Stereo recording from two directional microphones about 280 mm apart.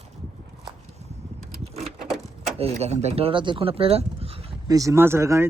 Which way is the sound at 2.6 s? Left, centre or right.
Right.